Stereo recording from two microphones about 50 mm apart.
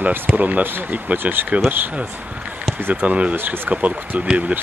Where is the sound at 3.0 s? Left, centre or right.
Right.